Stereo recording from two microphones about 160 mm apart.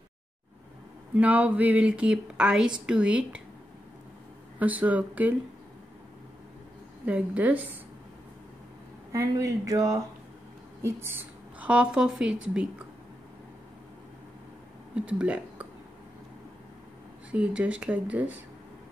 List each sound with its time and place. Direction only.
1.1 s speech: 10° right (ahead or behind)
4.6 s speech: 10° right (ahead or behind)
7.1 s speech: 10° right (ahead or behind)
9.1 s speech: 20° right (ahead or behind)
15.0 s speech: 10° right (ahead or behind)
17.3 s speech: 5° right (ahead or behind)